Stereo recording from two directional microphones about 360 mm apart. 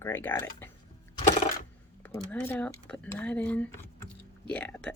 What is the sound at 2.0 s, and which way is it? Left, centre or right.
Speech, centre.